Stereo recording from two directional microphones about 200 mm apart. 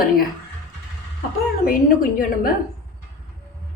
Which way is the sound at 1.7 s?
45° left (ahead or behind).